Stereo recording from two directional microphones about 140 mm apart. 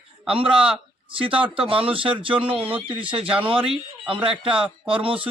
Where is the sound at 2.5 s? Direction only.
10° right (ahead or behind).